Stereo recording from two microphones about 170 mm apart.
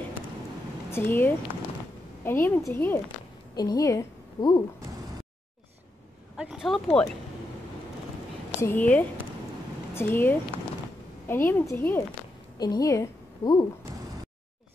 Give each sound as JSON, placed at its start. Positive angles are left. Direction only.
{"t": 0.9, "sound": "a woman's voice", "side_deg": 10}
{"t": 6.3, "sound": "speech", "side_deg": -5}
{"t": 8.5, "sound": "a woman's voice", "side_deg": 10}